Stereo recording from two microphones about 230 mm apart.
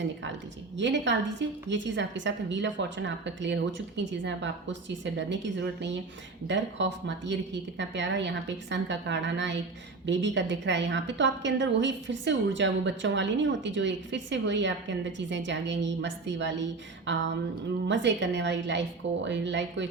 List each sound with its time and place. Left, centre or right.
0.8 s a woman's voice: right